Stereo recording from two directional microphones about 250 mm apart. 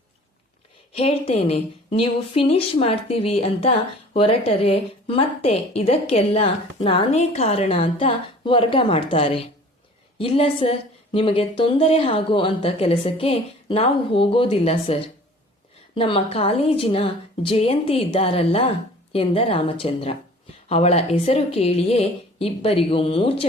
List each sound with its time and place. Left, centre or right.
0.9 s a woman's voice: left